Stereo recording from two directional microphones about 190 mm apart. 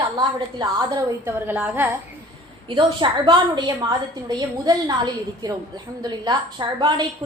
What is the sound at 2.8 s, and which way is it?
A woman's voice, 25° right (ahead or behind).